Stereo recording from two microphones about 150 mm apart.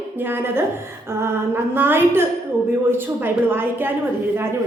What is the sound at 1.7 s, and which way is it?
A woman's voice, 15° right (ahead or behind).